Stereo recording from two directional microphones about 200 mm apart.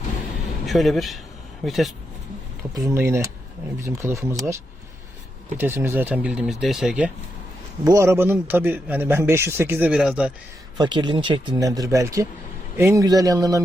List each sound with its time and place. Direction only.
0.6 s speech: centre (ahead or behind)
2.7 s speech: 15° right (ahead or behind)
5.5 s speech: 10° right (ahead or behind)
7.9 s speech: 15° right (ahead or behind)
10.8 s speech: 20° right (ahead or behind)